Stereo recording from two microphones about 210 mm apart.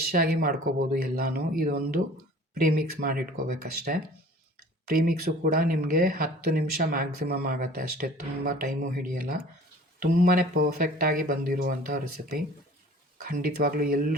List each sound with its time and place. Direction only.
0.0 s speech: 45° right (ahead or behind)